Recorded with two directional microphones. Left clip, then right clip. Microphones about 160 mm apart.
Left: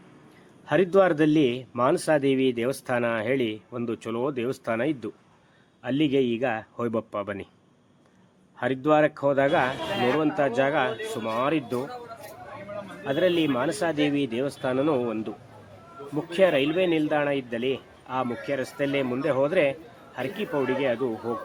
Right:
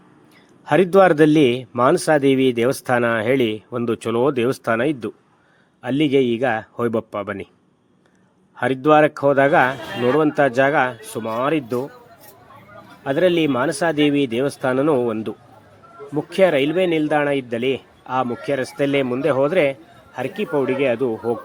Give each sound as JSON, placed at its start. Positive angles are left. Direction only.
{"t": 0.6, "sound": "a man's voice", "side_deg": -45}
{"t": 8.5, "sound": "speech", "side_deg": -35}
{"t": 13.1, "sound": "speech", "side_deg": -45}